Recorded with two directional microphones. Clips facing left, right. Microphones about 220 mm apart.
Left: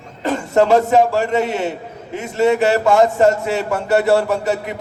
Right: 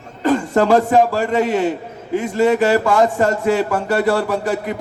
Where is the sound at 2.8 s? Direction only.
25° left (ahead or behind).